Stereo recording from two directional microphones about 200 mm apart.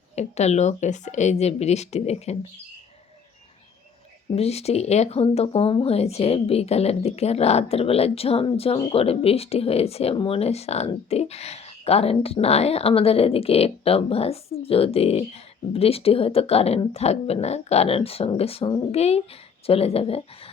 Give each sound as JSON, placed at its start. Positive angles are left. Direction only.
{"t": 0.2, "sound": "speech", "side_deg": 35}
{"t": 4.4, "sound": "speech", "side_deg": 30}